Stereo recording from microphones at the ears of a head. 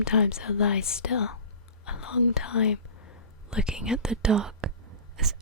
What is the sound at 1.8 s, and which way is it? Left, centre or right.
Whispering, left.